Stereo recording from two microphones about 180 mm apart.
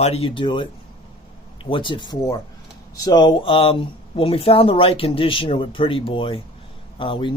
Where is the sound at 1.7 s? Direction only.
25° left (ahead or behind).